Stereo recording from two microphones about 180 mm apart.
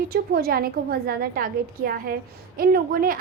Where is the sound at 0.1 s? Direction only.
55° right (ahead or behind).